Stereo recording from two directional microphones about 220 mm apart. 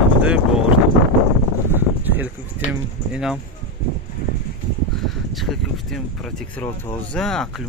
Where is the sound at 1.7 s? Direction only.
10° right (ahead or behind).